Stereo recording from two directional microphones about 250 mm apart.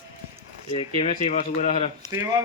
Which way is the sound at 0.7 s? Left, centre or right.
Left.